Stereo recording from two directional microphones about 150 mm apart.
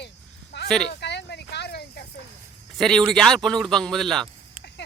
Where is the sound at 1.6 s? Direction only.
90° left.